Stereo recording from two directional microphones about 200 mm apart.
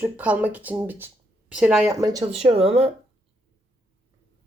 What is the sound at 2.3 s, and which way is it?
Speech, 30° right (ahead or behind).